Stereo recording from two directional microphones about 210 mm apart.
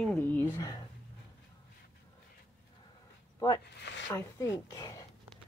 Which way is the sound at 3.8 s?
55° left (ahead or behind).